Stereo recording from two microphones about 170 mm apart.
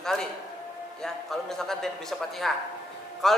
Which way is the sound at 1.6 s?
Centre (ahead or behind).